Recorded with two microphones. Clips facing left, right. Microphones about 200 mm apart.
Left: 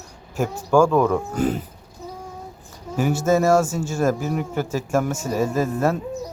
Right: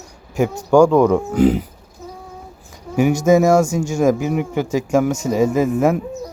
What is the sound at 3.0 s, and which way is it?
Speech, 15° right (ahead or behind).